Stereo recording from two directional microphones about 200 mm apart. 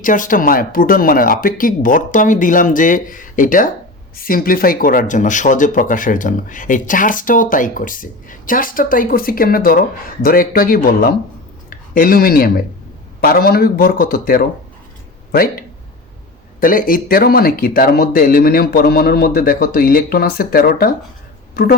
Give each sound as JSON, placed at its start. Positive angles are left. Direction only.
{"t": 0.0, "sound": "speech", "side_deg": 40}